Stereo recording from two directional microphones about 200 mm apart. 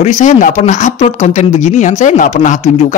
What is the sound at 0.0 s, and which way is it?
A man's voice, 35° left (ahead or behind).